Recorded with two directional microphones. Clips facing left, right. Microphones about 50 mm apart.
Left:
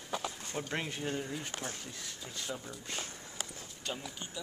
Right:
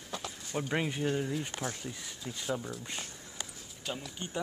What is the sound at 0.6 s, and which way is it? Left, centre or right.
Speech, centre.